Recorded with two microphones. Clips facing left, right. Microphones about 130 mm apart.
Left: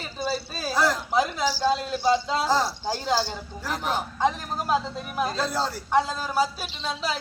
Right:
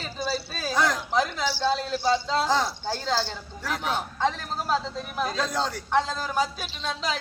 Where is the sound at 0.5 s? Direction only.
5° left (ahead or behind).